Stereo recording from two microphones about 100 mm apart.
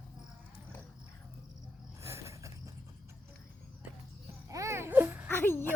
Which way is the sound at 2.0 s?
30° right (ahead or behind).